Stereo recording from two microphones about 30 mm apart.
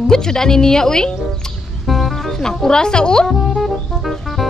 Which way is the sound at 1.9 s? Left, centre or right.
Centre.